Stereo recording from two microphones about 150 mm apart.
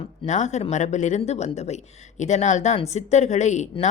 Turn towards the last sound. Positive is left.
turn(degrees=50)  # may be behind; listen again after turning